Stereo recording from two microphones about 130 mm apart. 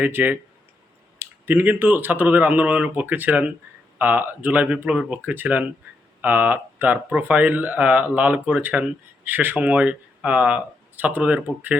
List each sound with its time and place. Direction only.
0.0 s speech: 15° right (ahead or behind)